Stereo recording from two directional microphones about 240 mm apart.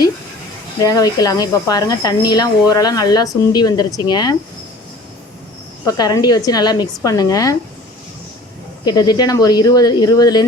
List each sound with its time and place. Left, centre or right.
0.9 s speech: centre
5.8 s speech: centre
8.8 s speech: centre